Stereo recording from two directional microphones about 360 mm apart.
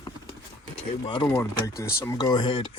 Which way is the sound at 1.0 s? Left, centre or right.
Centre.